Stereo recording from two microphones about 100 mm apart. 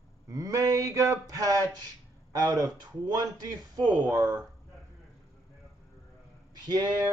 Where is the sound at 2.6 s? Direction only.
40° right (ahead or behind).